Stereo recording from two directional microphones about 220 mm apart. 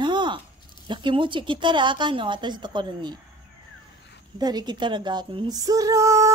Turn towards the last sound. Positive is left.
turn(degrees=-15)  # may be behind; listen again after turning